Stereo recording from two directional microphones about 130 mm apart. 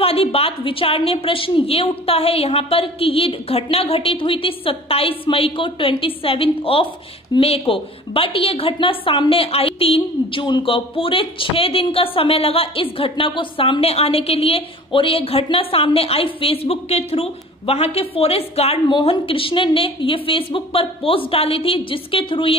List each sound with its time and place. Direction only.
0.0 s a woman's voice: 50° left (ahead or behind)